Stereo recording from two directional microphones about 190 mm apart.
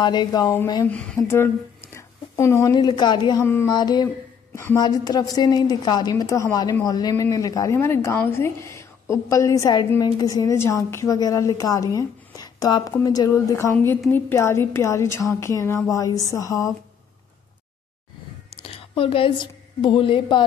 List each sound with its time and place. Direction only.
0.0 s a woman's voice: 25° left (ahead or behind)
3.4 s a woman's voice: 10° left (ahead or behind)
3.7 s a woman's voice: 20° left (ahead or behind)
18.5 s a woman's voice: 30° left (ahead or behind)